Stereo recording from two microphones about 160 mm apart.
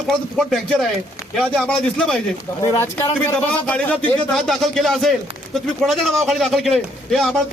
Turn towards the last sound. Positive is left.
turn(degrees=0)  # may be behind; listen again after turning